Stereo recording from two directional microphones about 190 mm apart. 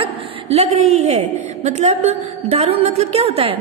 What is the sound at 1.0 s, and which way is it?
A woman's voice, 40° right (ahead or behind).